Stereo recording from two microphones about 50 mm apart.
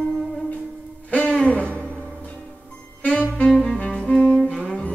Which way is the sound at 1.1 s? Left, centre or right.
Left.